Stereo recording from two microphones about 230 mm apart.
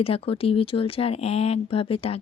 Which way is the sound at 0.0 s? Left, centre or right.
Left.